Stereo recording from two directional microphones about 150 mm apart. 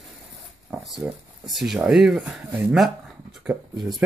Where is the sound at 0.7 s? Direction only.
Centre (ahead or behind).